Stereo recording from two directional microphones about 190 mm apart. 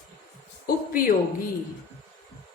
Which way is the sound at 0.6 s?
50° left (ahead or behind).